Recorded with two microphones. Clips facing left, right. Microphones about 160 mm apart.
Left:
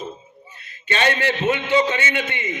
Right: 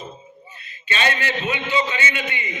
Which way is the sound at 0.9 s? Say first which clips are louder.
Left 3 dB; 55° left (ahead or behind).